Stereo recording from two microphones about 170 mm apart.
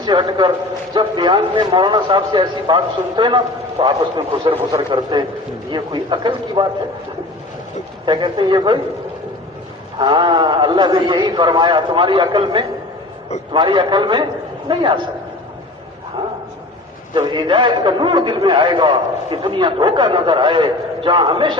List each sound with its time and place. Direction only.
0.0 s a man's voice: 25° right (ahead or behind)
8.0 s a man's voice: 25° right (ahead or behind)
10.0 s a man's voice: 25° right (ahead or behind)
17.2 s a man's voice: 25° right (ahead or behind)